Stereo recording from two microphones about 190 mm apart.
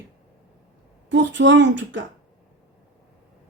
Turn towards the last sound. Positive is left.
turn(degrees=-75)  # may be behind; listen again after turning